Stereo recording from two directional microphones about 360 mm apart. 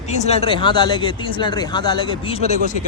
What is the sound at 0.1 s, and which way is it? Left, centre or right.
Speech, centre.